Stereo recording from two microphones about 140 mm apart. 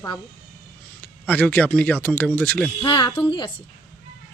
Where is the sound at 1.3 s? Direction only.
10° left (ahead or behind).